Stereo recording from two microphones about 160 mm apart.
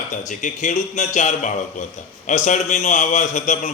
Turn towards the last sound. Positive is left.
turn(degrees=50)  # may be behind; listen again after turning